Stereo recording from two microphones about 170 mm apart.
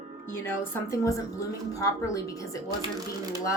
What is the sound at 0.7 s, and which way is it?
A woman's voice, 20° left (ahead or behind).